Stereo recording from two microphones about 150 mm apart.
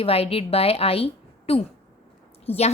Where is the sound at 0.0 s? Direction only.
40° left (ahead or behind).